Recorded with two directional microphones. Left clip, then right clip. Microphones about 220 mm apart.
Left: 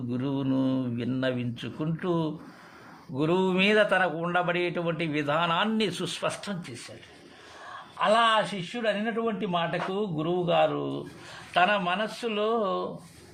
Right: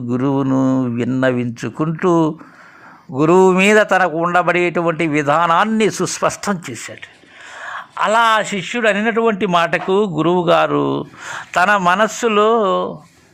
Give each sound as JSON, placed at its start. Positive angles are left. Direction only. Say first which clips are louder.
{"t": 0.1, "sound": "a man's voice", "louder": "right 13 dB", "side_deg": -30}
{"t": 6.4, "sound": "a man's voice", "louder": "right 15 dB", "side_deg": -30}